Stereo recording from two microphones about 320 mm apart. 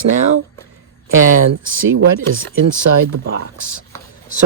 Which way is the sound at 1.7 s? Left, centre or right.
Right.